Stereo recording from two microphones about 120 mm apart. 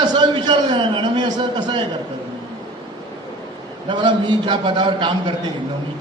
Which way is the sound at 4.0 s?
40° right (ahead or behind).